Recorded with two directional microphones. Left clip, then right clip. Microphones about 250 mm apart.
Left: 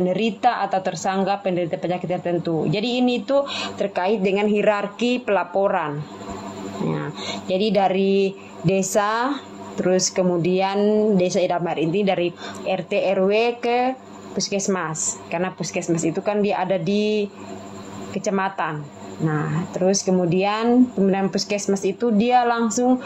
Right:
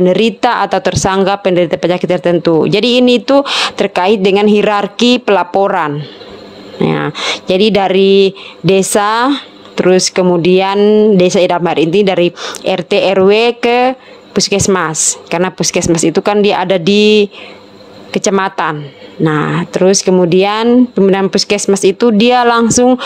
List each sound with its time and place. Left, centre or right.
0.0 s speech: right
6.9 s speech: right